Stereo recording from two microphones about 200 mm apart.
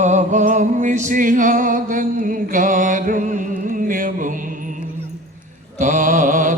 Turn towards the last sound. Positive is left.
turn(degrees=-40)  # may be behind; listen again after turning